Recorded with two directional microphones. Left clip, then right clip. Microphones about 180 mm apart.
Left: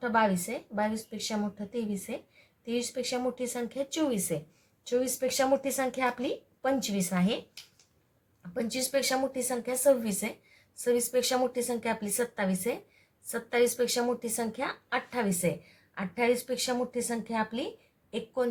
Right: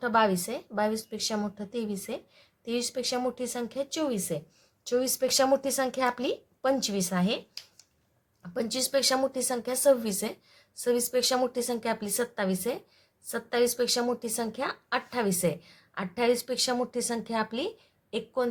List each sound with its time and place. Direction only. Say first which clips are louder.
0.0 s speech: right 2 dB; 20° right (ahead or behind)
4.0 s a woman's voice: left 2 dB; centre (ahead or behind)
4.9 s speech: right 2 dB; 20° right (ahead or behind)
6.8 s a woman's voice: right 2 dB; 10° right (ahead or behind)
8.4 s speech: right 2 dB; 20° right (ahead or behind)